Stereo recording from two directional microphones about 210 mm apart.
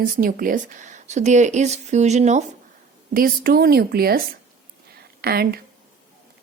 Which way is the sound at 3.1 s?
45° right (ahead or behind).